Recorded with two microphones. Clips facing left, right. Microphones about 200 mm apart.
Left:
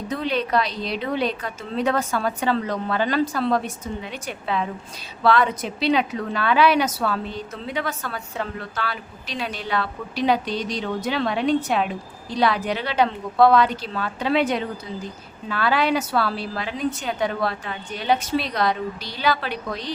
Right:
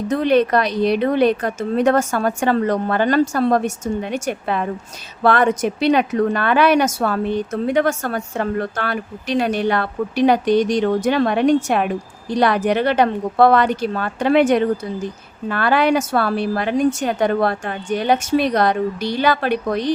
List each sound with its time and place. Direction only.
0.1 s a woman's voice: 55° right (ahead or behind)